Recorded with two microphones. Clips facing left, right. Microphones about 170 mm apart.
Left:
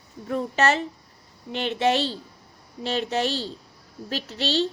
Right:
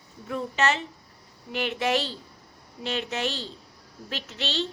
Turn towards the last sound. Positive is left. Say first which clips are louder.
# left 6 dB
turn(degrees=35)  # may be behind; listen again after turning